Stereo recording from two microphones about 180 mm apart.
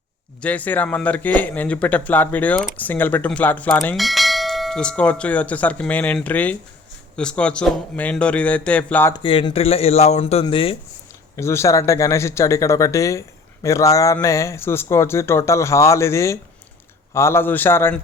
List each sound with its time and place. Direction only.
0.4 s speech: 10° left (ahead or behind)
9.1 s speech: 30° left (ahead or behind)
11.3 s speech: 15° left (ahead or behind)